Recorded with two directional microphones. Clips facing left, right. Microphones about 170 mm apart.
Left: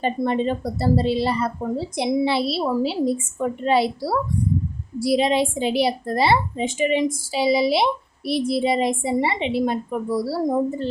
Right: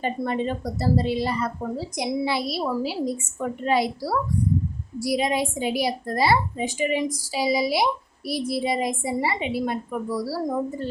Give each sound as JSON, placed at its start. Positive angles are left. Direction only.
{"t": 0.0, "sound": "a woman's voice", "side_deg": 30}